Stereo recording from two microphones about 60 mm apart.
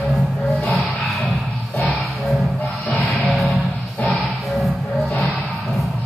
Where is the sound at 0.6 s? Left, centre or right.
Centre.